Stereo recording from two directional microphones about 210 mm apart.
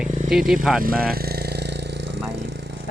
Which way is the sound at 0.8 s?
45° right (ahead or behind).